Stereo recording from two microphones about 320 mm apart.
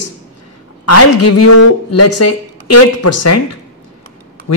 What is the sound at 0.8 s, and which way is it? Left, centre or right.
Speech, left.